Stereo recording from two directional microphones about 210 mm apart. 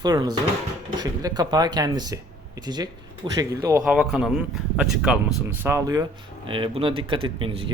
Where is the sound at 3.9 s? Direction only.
Centre (ahead or behind); by 7.7 s 25° right (ahead or behind).